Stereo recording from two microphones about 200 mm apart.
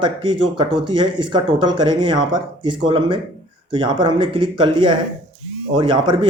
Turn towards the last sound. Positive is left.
turn(degrees=-25)  # may be behind; listen again after turning